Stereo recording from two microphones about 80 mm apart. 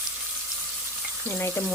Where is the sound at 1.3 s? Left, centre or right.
Left.